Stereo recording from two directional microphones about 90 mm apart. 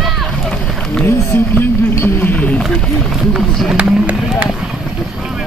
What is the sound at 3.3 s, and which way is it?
Run, 10° right (ahead or behind).